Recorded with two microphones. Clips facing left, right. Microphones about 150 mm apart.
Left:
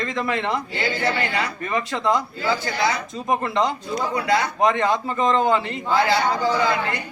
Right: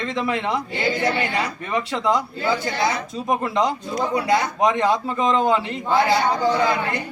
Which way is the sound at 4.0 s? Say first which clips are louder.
Right 3 dB; 20° right (ahead or behind).